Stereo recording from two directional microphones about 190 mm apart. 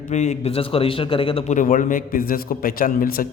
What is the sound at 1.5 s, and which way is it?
A man's voice, 40° left (ahead or behind).